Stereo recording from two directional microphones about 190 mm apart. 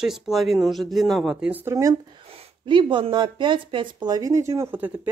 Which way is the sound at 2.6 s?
25° right (ahead or behind).